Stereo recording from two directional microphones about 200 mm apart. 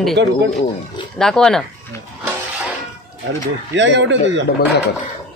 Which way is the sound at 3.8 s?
65° right (ahead or behind).